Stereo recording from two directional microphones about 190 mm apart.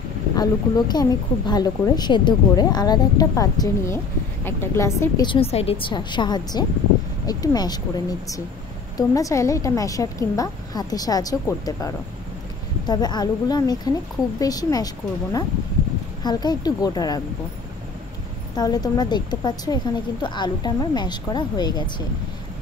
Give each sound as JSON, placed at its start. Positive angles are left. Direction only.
{"t": 0.4, "sound": "a woman's voice", "side_deg": 20}
{"t": 5.2, "sound": "a woman's voice", "side_deg": 30}
{"t": 16.3, "sound": "speech", "side_deg": 20}
{"t": 18.6, "sound": "speech", "side_deg": 20}